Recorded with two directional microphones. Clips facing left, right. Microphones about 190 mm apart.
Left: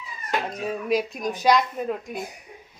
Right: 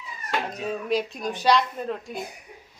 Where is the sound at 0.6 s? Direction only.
10° left (ahead or behind).